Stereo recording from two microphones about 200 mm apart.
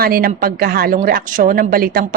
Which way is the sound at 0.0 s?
50° right (ahead or behind).